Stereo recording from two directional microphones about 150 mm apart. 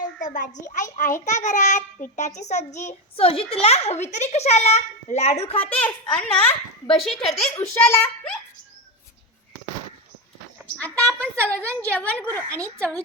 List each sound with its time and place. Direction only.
0.0 s a sound: 60° left (ahead or behind)
0.7 s a child's voice: 60° left (ahead or behind); by 5.5 s 45° left (ahead or behind)
5.5 s a child's voice: 10° left (ahead or behind)
7.5 s a child's voice: 15° left (ahead or behind)
10.8 s a child's voice: 10° left (ahead or behind)